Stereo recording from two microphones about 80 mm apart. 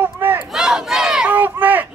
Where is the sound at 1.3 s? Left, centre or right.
Right.